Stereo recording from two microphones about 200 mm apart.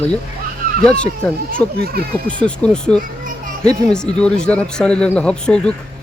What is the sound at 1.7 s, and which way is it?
Speech, 50° right (ahead or behind).